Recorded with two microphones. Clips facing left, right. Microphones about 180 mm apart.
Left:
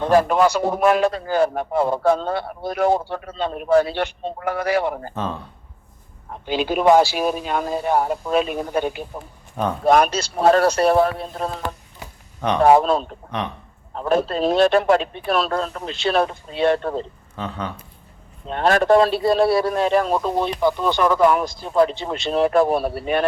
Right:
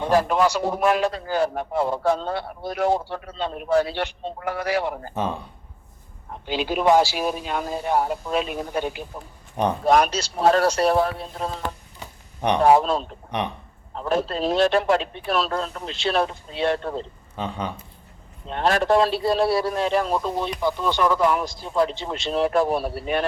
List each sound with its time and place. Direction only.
0.1 s a man's voice: 55° left (ahead or behind)
5.1 s speech: 10° right (ahead or behind)
6.5 s a man's voice: 50° left (ahead or behind)
12.6 s speech: 55° left (ahead or behind)
17.3 s speech: 15° right (ahead or behind)
18.5 s speech: 55° left (ahead or behind)